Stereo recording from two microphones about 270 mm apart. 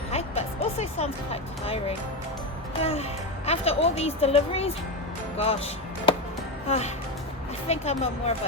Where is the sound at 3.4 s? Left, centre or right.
Left.